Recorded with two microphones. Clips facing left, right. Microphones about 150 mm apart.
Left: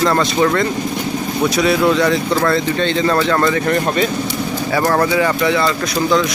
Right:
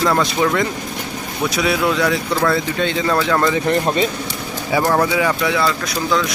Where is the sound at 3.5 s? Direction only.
25° right (ahead or behind).